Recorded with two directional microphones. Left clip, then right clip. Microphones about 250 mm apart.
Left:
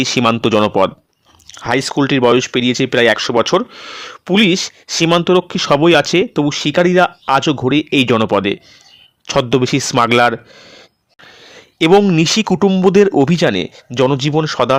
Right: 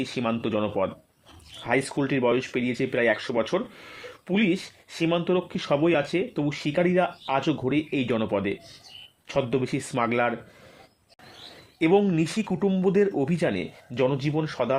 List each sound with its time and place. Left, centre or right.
0.0 s speech: left
11.8 s speech: left